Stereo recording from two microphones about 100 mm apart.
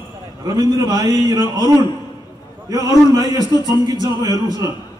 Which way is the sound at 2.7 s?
40° right (ahead or behind).